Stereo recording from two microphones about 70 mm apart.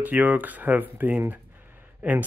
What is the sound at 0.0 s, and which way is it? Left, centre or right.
Speech, right.